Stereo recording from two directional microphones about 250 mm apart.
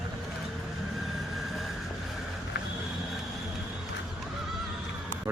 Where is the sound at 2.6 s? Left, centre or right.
Left.